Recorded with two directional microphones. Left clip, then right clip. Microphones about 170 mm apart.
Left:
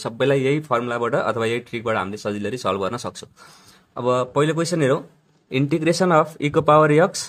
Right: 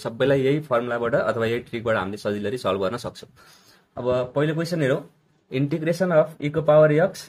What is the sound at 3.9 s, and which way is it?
Speech, 35° left (ahead or behind).